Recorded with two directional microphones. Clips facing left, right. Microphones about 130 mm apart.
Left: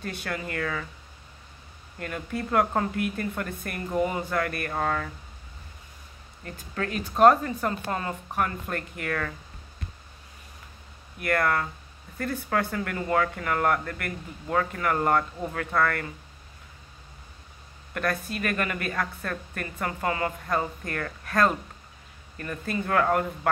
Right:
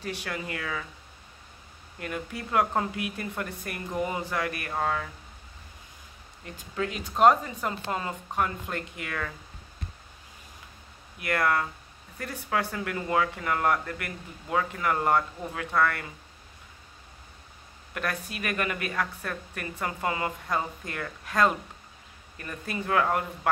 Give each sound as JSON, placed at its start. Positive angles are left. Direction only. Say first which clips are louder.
{"t": 0.0, "sound": "speech", "louder": "left 1 dB", "side_deg": -15}
{"t": 2.0, "sound": "speech", "louder": "left 3 dB", "side_deg": -10}
{"t": 6.4, "sound": "speech", "louder": "even", "side_deg": -15}
{"t": 11.1, "sound": "speech", "louder": "left 1 dB", "side_deg": -15}
{"t": 17.9, "sound": "speech", "louder": "left 4 dB", "side_deg": -15}
{"t": 22.7, "sound": "speech", "louder": "left 2 dB", "side_deg": -10}